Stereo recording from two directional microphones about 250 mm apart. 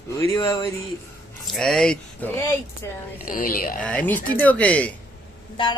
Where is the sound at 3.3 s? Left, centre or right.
Left.